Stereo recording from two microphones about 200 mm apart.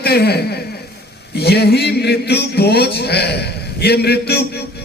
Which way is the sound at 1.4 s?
55° left (ahead or behind).